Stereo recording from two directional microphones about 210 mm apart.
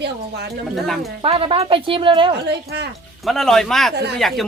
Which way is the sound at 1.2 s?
25° right (ahead or behind).